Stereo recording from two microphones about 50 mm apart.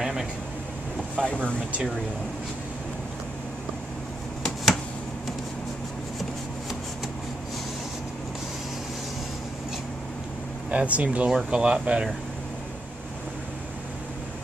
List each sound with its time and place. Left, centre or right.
0.0 s air conditioning: centre
1.1 s speech: left
10.7 s speech: right
11.2 s speech: centre